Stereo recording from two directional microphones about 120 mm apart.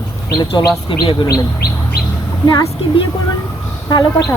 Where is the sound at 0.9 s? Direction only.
45° left (ahead or behind).